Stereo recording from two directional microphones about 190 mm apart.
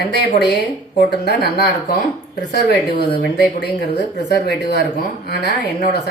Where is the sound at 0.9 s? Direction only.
55° left (ahead or behind).